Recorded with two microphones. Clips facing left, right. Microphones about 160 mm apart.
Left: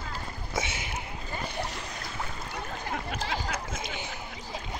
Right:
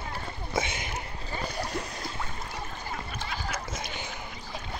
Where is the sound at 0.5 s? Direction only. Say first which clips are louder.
Right 3 dB; 5° left (ahead or behind).